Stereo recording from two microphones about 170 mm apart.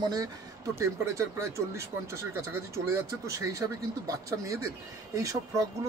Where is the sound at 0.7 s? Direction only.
15° right (ahead or behind).